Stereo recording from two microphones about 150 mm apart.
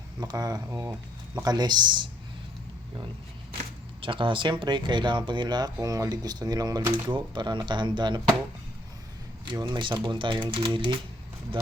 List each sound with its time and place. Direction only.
0.2 s speech: 25° right (ahead or behind)
4.0 s speech: 35° right (ahead or behind)
9.5 s speech: 30° right (ahead or behind)